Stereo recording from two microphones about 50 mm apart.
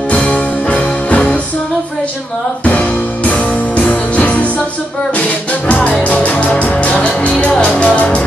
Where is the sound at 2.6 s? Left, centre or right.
Left.